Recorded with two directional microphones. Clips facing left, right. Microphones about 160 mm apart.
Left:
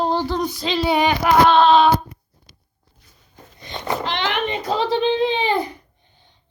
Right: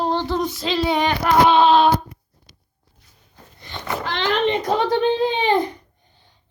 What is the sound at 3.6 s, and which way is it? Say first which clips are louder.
Wail: left 2 dB; 20° left (ahead or behind).